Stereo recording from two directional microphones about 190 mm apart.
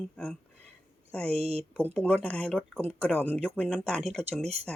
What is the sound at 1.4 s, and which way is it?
Speech, 30° right (ahead or behind).